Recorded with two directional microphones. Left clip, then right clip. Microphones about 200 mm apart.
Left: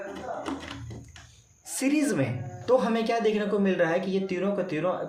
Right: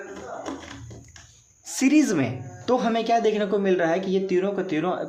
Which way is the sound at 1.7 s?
45° right (ahead or behind).